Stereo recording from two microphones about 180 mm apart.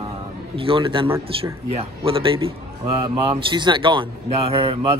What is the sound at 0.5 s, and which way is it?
A man's voice, 30° right (ahead or behind).